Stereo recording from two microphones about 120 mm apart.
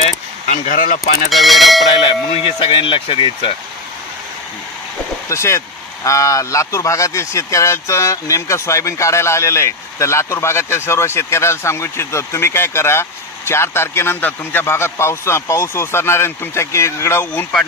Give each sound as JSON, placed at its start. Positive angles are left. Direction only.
{"t": 0.0, "sound": "a sound", "side_deg": 90}
{"t": 1.3, "sound": "speech", "side_deg": 0}
{"t": 2.0, "sound": "speech", "side_deg": 45}
{"t": 5.3, "sound": "speech", "side_deg": 25}
{"t": 17.3, "sound": "speech", "side_deg": 10}